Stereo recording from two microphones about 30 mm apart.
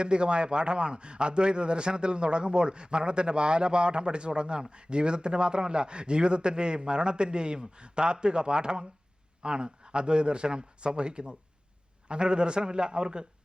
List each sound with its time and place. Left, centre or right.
0.0 s a man's voice: right